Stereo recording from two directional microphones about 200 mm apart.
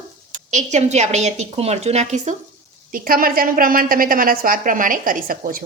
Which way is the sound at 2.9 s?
45° right (ahead or behind).